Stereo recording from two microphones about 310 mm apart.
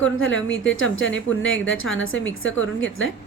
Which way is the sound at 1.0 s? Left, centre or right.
Left.